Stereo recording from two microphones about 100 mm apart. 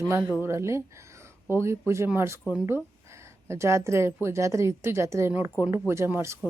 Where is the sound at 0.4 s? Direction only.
30° right (ahead or behind).